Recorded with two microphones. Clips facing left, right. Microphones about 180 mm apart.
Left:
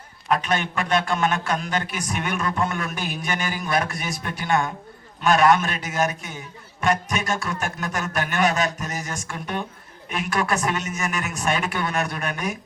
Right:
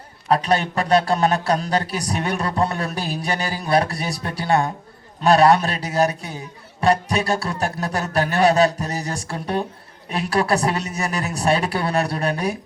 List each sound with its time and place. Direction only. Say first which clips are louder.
0.3 s a man's voice: right 4 dB; 35° right (ahead or behind)